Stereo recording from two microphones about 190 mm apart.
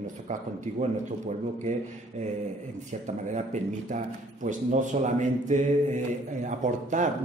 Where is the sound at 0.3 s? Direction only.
40° right (ahead or behind).